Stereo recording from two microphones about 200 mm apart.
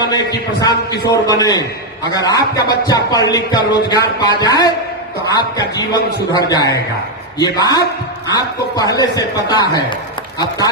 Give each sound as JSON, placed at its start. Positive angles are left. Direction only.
{"t": 0.0, "sound": "a man's voice", "side_deg": 20}